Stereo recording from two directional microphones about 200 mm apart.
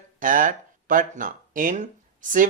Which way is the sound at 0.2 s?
40° right (ahead or behind).